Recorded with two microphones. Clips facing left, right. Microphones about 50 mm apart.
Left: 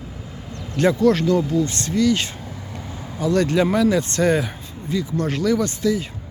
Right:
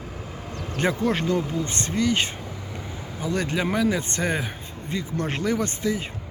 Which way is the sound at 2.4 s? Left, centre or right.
Centre.